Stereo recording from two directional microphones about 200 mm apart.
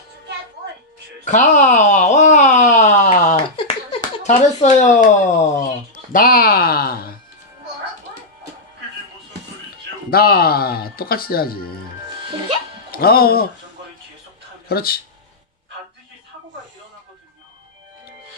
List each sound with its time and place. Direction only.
1.2 s a sound: 40° left (ahead or behind)
6.1 s speech: 45° left (ahead or behind)
10.1 s speech: 50° left (ahead or behind)
12.9 s speech: 50° left (ahead or behind)
14.7 s speech: 50° left (ahead or behind)